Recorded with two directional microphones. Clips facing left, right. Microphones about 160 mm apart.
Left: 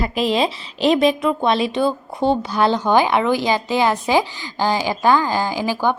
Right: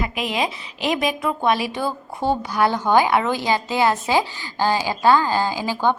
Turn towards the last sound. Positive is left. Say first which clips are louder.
# left 1 dB
turn(degrees=15)  # may be behind; listen again after turning